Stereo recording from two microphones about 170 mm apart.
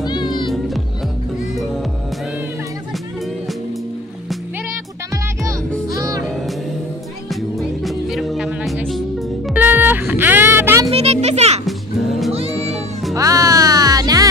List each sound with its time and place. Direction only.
0.0 s music: 25° left (ahead or behind)
5.9 s music: 20° right (ahead or behind)
7.2 s music: centre (ahead or behind)
10.9 s music: 40° right (ahead or behind)
11.6 s music: centre (ahead or behind)
12.3 s music: 35° right (ahead or behind)
13.1 s music: 20° right (ahead or behind)